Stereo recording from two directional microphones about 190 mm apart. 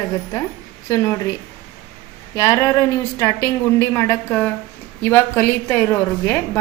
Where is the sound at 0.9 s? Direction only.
15° left (ahead or behind).